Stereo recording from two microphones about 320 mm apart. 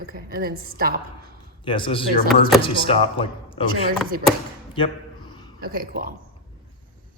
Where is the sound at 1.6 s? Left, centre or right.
Centre.